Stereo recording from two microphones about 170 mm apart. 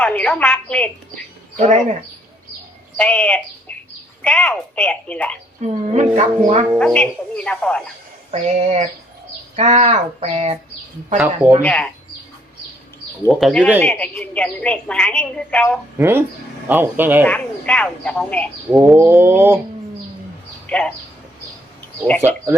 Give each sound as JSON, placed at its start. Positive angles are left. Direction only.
{"t": 0.0, "sound": "a woman's voice", "side_deg": 10}
{"t": 1.5, "sound": "speech", "side_deg": -45}
{"t": 3.0, "sound": "a woman's voice", "side_deg": 5}
{"t": 5.6, "sound": "speech", "side_deg": -40}
{"t": 6.7, "sound": "a woman's voice", "side_deg": 5}
{"t": 8.3, "sound": "speech", "side_deg": -40}
{"t": 11.6, "sound": "a woman's voice", "side_deg": 5}
{"t": 13.2, "sound": "a woman's voice", "side_deg": 5}
{"t": 16.0, "sound": "bird", "side_deg": -15}
{"t": 17.2, "sound": "a woman's voice", "side_deg": 5}
{"t": 18.9, "sound": "bird", "side_deg": -15}
{"t": 20.7, "sound": "speech", "side_deg": 5}
{"t": 22.2, "sound": "bird", "side_deg": -10}